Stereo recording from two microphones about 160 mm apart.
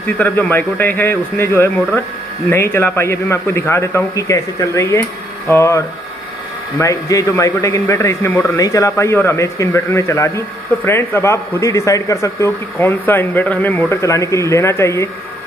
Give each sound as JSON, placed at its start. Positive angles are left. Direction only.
{"t": 0.0, "sound": "a man's voice", "side_deg": 10}